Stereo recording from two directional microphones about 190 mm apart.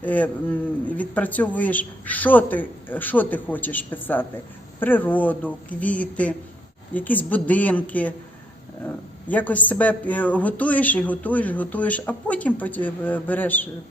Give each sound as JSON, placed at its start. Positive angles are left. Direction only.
{"t": 0.0, "sound": "speech", "side_deg": 10}
{"t": 9.3, "sound": "speech", "side_deg": 10}